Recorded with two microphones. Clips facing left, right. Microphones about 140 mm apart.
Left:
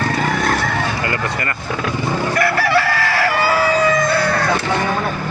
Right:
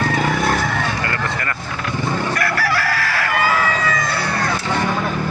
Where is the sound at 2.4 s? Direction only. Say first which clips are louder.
Left 4 dB; 25° left (ahead or behind).